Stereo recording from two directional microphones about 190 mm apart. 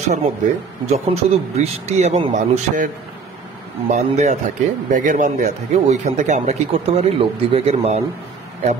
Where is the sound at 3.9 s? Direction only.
35° right (ahead or behind).